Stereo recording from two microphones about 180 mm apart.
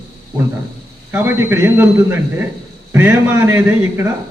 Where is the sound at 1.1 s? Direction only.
10° right (ahead or behind).